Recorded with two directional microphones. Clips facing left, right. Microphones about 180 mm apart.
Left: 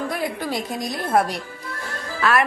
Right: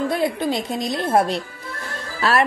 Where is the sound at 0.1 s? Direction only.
25° right (ahead or behind).